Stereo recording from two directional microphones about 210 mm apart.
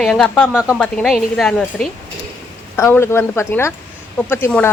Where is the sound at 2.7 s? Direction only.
10° left (ahead or behind).